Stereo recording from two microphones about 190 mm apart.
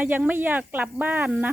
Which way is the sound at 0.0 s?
10° right (ahead or behind).